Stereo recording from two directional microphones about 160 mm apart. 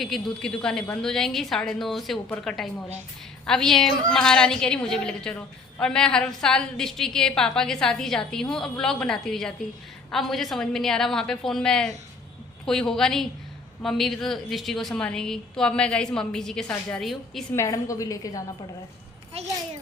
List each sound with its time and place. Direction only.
0.0 s a woman's voice: 5° left (ahead or behind)
17.5 s a woman's voice: 20° left (ahead or behind)